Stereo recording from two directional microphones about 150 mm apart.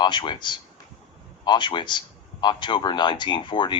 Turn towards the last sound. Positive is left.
turn(degrees=30)  # may be behind; listen again after turning